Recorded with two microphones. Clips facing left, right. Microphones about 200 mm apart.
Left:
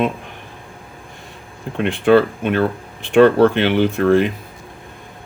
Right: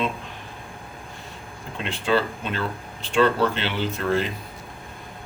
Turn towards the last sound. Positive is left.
turn(degrees=60)  # may be behind; listen again after turning